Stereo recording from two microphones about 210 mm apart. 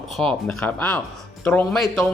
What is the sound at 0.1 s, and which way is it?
Speech, centre (ahead or behind).